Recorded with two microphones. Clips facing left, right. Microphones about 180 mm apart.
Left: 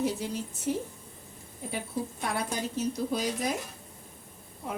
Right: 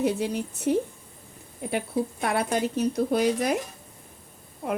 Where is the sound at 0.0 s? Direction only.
65° right (ahead or behind).